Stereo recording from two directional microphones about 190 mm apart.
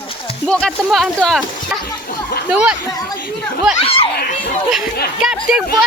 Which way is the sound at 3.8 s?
30° left (ahead or behind).